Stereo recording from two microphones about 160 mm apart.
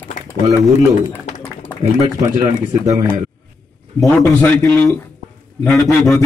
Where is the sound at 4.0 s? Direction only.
15° left (ahead or behind).